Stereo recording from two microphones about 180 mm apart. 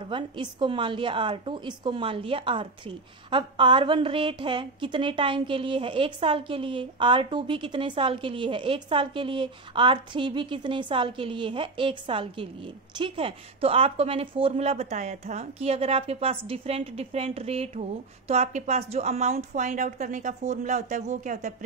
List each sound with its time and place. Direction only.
0.1 s a woman's voice: 25° right (ahead or behind); by 21.5 s 40° right (ahead or behind)